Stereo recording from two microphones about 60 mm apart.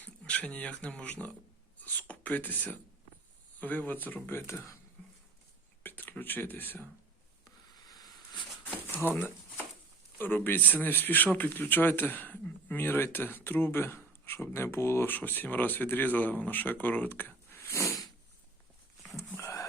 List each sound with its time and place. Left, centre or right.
0.0 s speech: left
5.8 s speech: left
8.9 s speech: left
10.2 s speech: left
15.0 s speech: left
19.4 s a sound: left